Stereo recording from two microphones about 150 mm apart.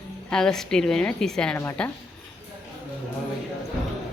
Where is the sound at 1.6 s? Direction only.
15° left (ahead or behind).